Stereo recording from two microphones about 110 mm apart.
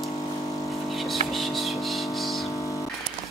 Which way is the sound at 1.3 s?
Centre (ahead or behind).